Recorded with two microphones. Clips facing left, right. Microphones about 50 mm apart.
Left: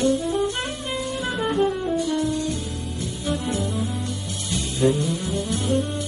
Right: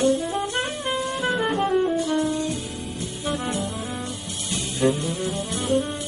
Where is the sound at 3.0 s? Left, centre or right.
Centre.